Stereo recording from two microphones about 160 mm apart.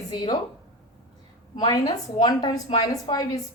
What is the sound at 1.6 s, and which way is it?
A woman's voice, 25° left (ahead or behind).